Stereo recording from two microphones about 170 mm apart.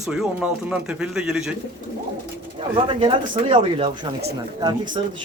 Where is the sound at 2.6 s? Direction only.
30° right (ahead or behind).